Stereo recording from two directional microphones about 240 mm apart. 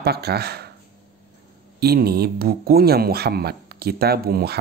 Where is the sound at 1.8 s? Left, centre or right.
Right.